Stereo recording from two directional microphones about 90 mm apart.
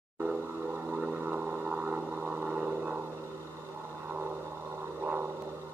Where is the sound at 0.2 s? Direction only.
15° right (ahead or behind).